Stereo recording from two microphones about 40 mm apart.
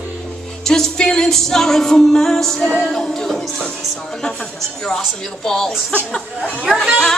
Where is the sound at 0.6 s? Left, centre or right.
Centre.